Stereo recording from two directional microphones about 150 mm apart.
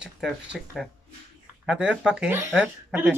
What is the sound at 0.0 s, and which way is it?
Speech, 5° right (ahead or behind).